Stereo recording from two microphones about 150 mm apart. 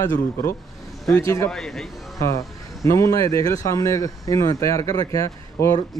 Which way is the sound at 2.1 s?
20° left (ahead or behind).